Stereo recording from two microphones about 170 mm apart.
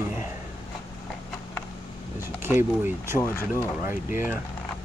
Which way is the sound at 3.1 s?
15° left (ahead or behind).